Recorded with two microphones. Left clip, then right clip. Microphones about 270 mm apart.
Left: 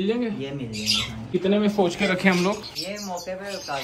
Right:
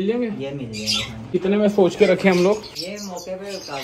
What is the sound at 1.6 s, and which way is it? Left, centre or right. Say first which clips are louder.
Speech: right 6 dB; centre.